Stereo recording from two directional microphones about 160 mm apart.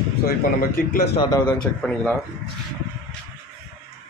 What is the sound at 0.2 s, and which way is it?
Speech, 65° left (ahead or behind).